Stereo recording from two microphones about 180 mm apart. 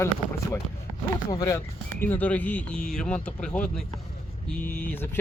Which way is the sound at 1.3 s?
20° left (ahead or behind).